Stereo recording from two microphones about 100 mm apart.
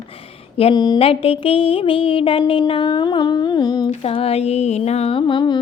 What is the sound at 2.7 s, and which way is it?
Humming, 60° left (ahead or behind).